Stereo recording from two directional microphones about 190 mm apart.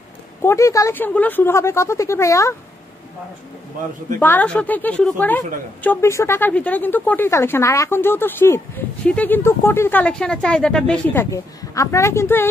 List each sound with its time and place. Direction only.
0.4 s a woman's voice: 15° left (ahead or behind)
4.2 s a woman's voice: 10° left (ahead or behind)
11.2 s a woman's voice: 15° left (ahead or behind)